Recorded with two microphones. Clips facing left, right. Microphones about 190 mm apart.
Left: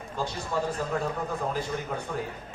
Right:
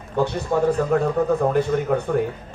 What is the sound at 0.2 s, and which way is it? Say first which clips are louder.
A man's voice: right 10 dB; 60° right (ahead or behind).